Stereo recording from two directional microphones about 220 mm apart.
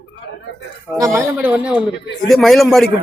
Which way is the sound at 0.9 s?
15° right (ahead or behind).